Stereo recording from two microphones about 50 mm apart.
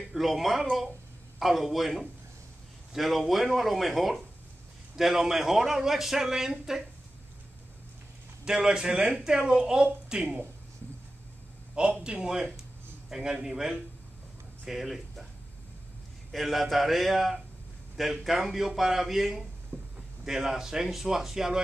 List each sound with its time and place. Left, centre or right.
0.1 s a man's voice: centre
8.5 s a man's voice: centre
11.7 s a man's voice: right; by 15.2 s centre
16.3 s speech: centre
19.7 s a sound: right
20.2 s a man's voice: centre